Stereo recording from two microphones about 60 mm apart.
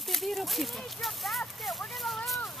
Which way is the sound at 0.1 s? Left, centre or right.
Centre.